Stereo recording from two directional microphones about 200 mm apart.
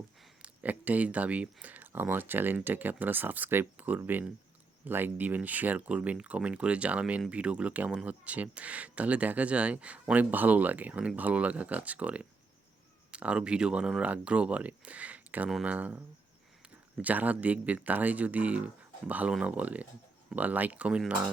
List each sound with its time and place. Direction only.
0.4 s speech: 10° right (ahead or behind)